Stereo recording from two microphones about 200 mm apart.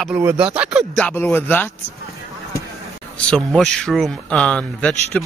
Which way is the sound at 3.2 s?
5° left (ahead or behind).